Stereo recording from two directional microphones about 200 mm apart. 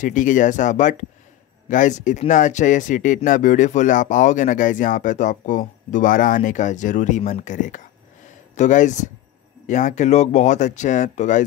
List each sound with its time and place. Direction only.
0.0 s speech: 40° left (ahead or behind)